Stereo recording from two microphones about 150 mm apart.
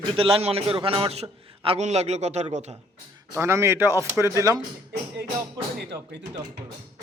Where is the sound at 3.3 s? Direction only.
20° right (ahead or behind).